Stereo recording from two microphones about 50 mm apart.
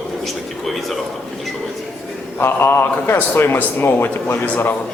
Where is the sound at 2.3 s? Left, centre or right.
Left.